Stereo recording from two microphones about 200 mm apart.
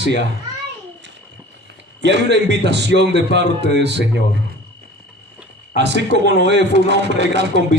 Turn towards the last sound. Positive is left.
turn(degrees=-60)  # may be behind; listen again after turning